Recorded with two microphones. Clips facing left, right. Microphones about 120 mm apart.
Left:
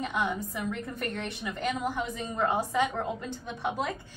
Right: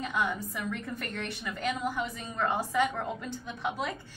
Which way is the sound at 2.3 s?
15° left (ahead or behind).